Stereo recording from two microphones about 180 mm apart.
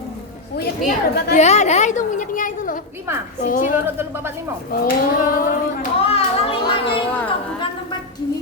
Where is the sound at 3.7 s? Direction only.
15° right (ahead or behind).